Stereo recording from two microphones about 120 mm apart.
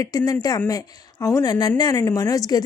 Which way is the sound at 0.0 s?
30° left (ahead or behind).